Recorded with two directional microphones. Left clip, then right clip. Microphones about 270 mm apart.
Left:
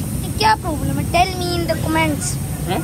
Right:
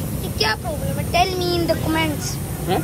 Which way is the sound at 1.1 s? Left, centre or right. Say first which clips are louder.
Left 1 dB; centre.